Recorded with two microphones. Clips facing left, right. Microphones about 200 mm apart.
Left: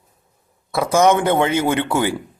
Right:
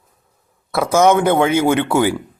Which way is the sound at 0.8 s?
15° left (ahead or behind).